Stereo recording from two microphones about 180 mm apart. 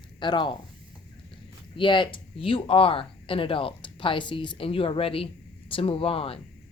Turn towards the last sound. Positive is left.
turn(degrees=30)  # may be behind; listen again after turning